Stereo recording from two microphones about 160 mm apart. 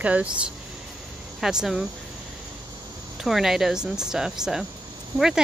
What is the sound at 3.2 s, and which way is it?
Speech, centre (ahead or behind).